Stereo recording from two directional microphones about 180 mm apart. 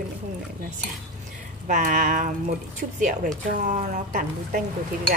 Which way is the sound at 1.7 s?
50° right (ahead or behind).